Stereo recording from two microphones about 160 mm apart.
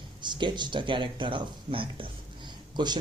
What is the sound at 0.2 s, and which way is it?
Speech, 30° right (ahead or behind).